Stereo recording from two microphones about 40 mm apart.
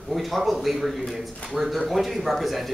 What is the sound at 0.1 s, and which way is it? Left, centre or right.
A man's voice, centre.